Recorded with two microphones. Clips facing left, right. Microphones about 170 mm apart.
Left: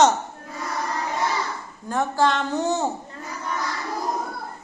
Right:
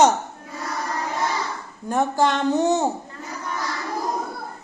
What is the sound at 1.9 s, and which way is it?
Singing, 20° right (ahead or behind).